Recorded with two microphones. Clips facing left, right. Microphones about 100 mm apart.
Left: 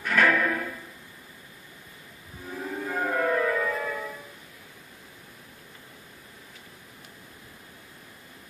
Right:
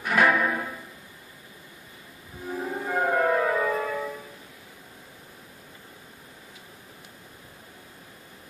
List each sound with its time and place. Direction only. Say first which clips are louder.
0.0 s music: right 1 dB; 15° right (ahead or behind)
2.5 s music: right 3 dB; 25° right (ahead or behind)